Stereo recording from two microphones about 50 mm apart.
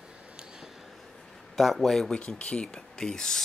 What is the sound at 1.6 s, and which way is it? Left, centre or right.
Speech, centre.